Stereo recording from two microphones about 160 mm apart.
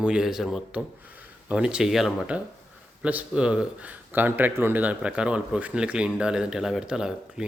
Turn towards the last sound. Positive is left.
turn(degrees=-5)  # may be behind; listen again after turning